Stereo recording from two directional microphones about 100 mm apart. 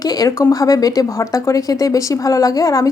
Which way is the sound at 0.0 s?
40° left (ahead or behind).